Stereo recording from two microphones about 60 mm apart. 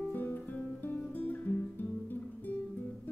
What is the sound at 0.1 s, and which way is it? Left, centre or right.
Guitar, left.